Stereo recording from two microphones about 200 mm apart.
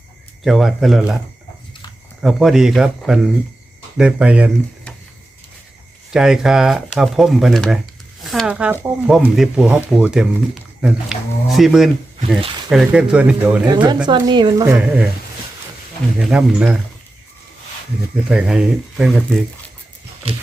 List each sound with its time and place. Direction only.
0.4 s speech: centre (ahead or behind)
2.2 s speech: centre (ahead or behind)
6.1 s speech: 5° right (ahead or behind)
13.7 s a woman's voice: 20° right (ahead or behind)
16.1 s speech: 5° right (ahead or behind)
18.3 s speech: 5° right (ahead or behind)